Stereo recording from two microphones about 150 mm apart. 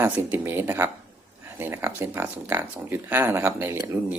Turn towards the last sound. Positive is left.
turn(degrees=-20)  # may be behind; listen again after turning